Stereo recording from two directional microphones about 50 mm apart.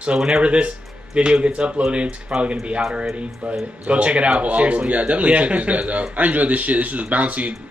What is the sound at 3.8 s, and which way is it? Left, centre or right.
Speech, right.